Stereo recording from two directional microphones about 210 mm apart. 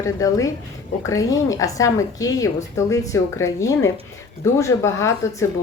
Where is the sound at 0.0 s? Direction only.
15° left (ahead or behind).